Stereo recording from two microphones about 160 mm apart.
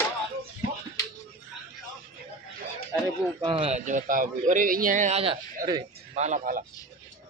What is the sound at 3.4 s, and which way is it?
A man's voice, 35° right (ahead or behind).